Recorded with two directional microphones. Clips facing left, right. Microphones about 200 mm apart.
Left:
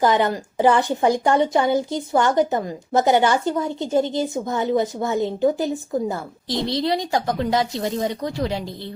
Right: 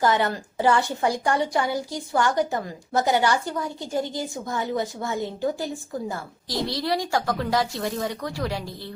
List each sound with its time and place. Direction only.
0.0 s a woman's voice: 20° left (ahead or behind)